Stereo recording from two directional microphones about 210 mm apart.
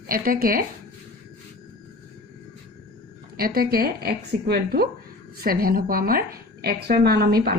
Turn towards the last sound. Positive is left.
turn(degrees=-45)  # may be behind; listen again after turning